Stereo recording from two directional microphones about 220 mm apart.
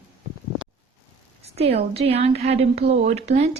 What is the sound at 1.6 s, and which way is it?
Speech, 25° right (ahead or behind).